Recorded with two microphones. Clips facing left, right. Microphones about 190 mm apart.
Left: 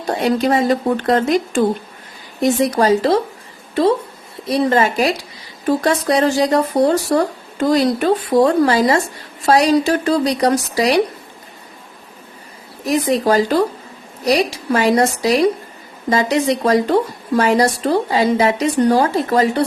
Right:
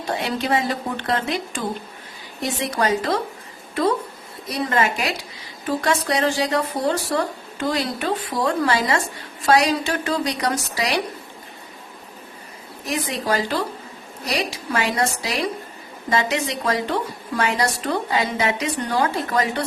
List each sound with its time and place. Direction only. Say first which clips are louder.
0.0 s a woman's voice: left 8 dB; 45° left (ahead or behind)
4.4 s a woman's voice: left 7 dB; 30° left (ahead or behind)
12.8 s a woman's voice: left 10 dB; 40° left (ahead or behind)